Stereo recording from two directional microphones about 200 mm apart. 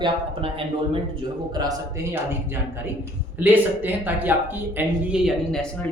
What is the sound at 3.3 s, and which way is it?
Speech, 10° right (ahead or behind).